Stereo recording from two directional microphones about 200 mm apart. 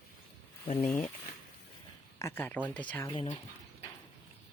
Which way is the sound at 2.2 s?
10° left (ahead or behind).